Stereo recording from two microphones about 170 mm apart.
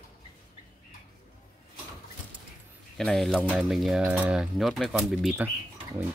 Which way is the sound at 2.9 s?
Centre (ahead or behind).